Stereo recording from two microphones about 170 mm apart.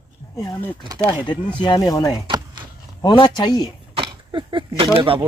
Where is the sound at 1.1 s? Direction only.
25° left (ahead or behind).